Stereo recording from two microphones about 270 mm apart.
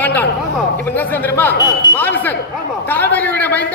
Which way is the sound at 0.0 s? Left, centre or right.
Centre.